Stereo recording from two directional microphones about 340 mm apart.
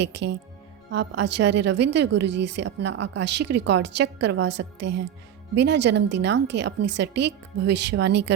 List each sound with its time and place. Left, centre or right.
0.0 s speech: right